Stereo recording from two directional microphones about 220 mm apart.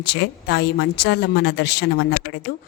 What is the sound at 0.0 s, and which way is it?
A woman's voice, 50° left (ahead or behind).